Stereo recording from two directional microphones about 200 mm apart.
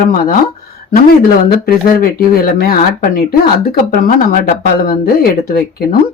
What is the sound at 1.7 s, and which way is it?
Speech, 45° left (ahead or behind).